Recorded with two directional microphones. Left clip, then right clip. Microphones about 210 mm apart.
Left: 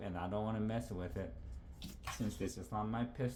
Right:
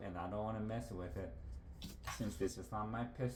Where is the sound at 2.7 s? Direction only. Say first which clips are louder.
Left 2 dB; 35° left (ahead or behind).